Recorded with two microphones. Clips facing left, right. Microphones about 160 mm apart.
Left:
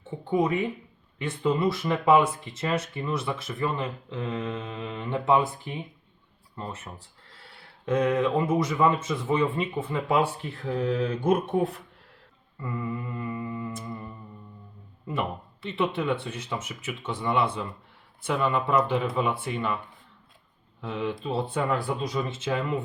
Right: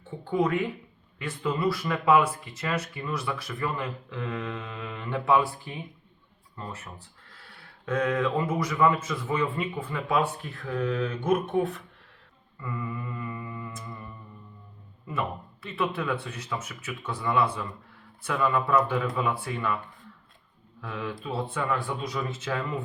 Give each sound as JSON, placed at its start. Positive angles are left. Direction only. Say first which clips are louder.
{"t": 0.3, "sound": "speech", "louder": "left 1 dB", "side_deg": 20}
{"t": 20.8, "sound": "speech", "louder": "left 4 dB", "side_deg": 25}